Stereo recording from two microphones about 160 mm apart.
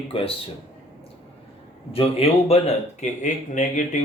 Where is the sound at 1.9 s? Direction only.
40° left (ahead or behind).